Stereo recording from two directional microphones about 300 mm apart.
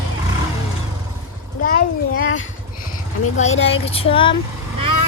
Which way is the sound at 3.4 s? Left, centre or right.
Left.